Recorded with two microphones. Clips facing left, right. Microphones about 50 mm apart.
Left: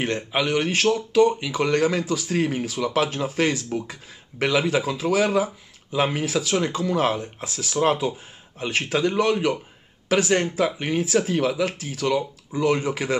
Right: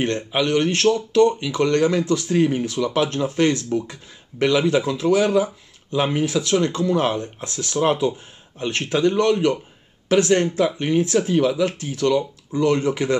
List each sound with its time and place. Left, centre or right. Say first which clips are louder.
0.0 s speech: right 2 dB; centre